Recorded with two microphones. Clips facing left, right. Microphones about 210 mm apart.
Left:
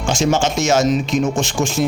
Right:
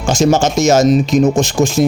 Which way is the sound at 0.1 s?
40° right (ahead or behind).